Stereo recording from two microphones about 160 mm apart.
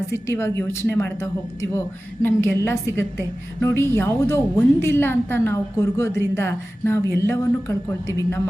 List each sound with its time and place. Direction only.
0.1 s a woman's voice: 15° left (ahead or behind)